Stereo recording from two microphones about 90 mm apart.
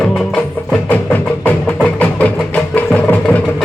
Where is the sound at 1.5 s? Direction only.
15° left (ahead or behind).